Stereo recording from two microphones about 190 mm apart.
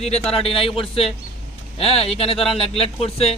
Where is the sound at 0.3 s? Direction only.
30° left (ahead or behind).